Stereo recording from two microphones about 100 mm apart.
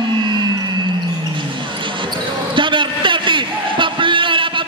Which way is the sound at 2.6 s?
55° right (ahead or behind).